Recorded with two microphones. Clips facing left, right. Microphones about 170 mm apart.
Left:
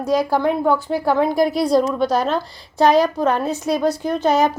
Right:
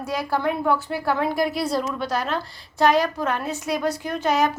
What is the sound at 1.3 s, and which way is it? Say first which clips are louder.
Speech: left 6 dB; 40° left (ahead or behind).